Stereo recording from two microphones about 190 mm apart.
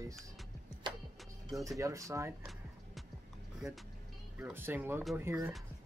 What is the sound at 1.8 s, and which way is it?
Speech, 15° right (ahead or behind).